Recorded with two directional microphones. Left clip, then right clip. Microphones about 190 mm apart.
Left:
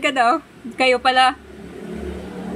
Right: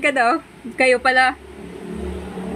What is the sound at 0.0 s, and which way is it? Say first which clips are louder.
Speech: even; 5° left (ahead or behind).